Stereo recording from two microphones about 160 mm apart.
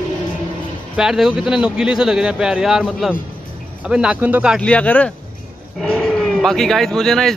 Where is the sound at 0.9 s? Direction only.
Centre (ahead or behind).